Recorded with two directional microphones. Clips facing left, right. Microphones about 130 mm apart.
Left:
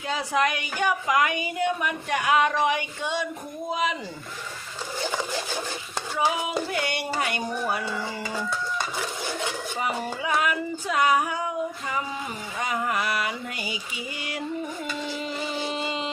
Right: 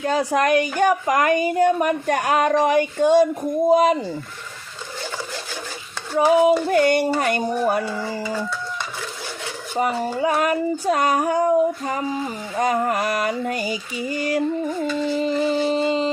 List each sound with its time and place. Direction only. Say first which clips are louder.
0.0 s speech: right 6 dB; 45° right (ahead or behind)
6.1 s speech: right 11 dB; 45° right (ahead or behind)
9.7 s speech: right 10 dB; 45° right (ahead or behind)
12.5 s mantra: right 7 dB; 45° right (ahead or behind)